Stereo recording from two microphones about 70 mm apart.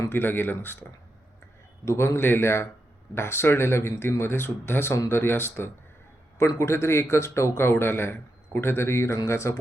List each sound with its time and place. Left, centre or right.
0.1 s speech: left
1.8 s speech: left